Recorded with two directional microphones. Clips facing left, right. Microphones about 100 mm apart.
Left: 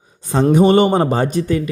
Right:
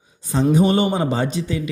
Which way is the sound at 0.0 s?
55° left (ahead or behind).